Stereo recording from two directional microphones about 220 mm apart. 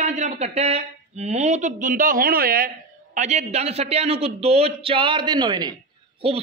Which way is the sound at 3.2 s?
30° right (ahead or behind).